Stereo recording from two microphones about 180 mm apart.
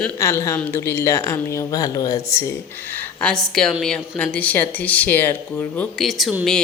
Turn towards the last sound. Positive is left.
turn(degrees=0)  # may be behind; listen again after turning